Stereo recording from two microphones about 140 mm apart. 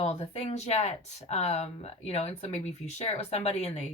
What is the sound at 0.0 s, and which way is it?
Speech, 45° left (ahead or behind).